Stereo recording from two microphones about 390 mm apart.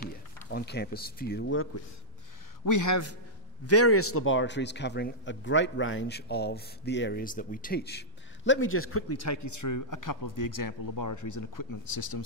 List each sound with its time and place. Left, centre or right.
0.5 s a man's voice: left
2.6 s a man's voice: left